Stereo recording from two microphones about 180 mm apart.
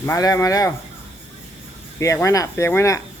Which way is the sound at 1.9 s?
15° left (ahead or behind).